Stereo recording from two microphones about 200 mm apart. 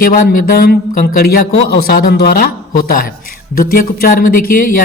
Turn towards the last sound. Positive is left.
turn(degrees=45)  # may be behind; listen again after turning